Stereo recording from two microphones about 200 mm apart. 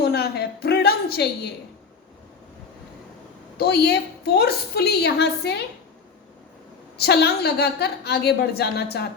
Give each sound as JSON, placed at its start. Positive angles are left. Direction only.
{"t": 0.0, "sound": "a sound", "side_deg": 50}
{"t": 3.6, "sound": "a woman's voice", "side_deg": 55}
{"t": 6.9, "sound": "a woman's voice", "side_deg": 55}